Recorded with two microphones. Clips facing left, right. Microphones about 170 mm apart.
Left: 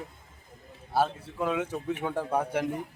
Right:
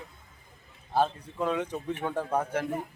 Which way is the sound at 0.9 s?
5° left (ahead or behind).